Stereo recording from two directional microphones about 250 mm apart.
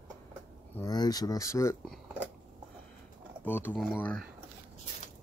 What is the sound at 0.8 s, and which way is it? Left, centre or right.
Speech, centre.